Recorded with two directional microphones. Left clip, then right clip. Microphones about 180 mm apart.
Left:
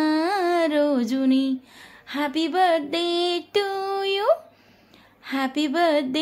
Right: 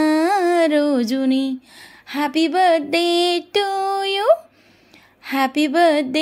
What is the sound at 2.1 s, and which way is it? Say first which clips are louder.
Mantra: right 5 dB; 30° right (ahead or behind).